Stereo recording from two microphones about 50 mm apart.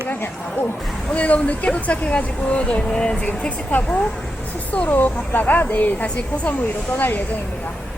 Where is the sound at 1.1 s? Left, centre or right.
Left.